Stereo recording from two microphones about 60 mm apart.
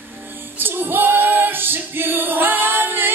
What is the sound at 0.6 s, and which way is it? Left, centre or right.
Female singing, right.